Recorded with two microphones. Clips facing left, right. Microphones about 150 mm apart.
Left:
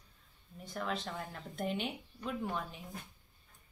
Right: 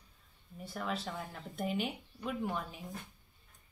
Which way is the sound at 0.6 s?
Centre (ahead or behind).